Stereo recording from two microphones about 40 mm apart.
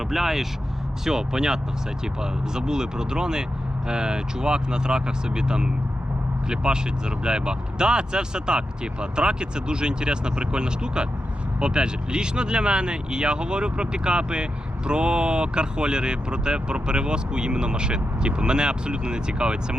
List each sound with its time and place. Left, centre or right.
0.1 s speech: centre; by 19.5 s right